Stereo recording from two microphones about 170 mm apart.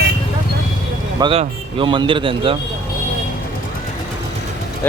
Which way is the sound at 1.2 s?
35° right (ahead or behind).